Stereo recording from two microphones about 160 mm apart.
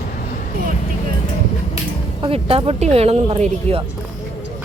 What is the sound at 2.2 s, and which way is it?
Speech, 35° right (ahead or behind).